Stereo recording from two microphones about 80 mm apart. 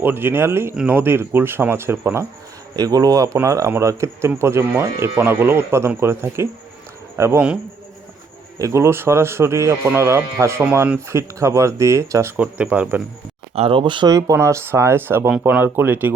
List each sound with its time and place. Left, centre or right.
0.0 s speech: right
2.7 s speech: right
3.3 s a man's voice: right
7.3 s speech: centre
8.5 s a man's voice: right
12.4 s speech: centre
13.7 s speech: right
14.1 s a man's voice: right